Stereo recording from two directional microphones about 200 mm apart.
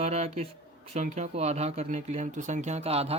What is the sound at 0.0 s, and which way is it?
Speech, 35° right (ahead or behind).